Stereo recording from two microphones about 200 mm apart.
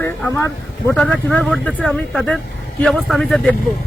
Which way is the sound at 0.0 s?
15° left (ahead or behind).